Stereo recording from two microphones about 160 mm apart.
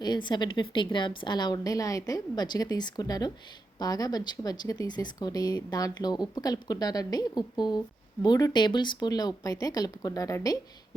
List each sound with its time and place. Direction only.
0.0 s a woman's voice: 30° left (ahead or behind)